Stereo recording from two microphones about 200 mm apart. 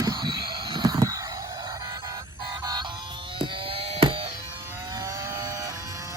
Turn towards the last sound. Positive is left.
turn(degrees=-15)  # may be behind; listen again after turning